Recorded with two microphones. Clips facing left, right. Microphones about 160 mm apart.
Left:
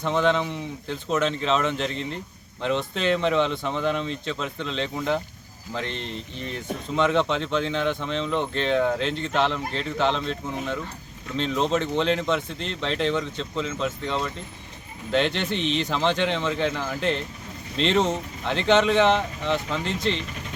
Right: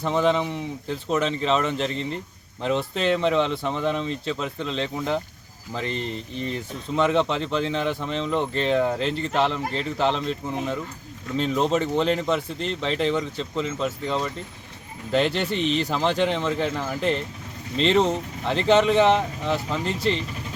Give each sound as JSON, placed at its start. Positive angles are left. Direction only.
{"t": 0.0, "sound": "speech", "side_deg": -5}